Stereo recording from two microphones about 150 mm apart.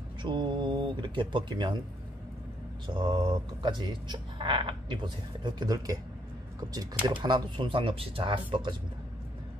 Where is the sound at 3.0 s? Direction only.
30° right (ahead or behind).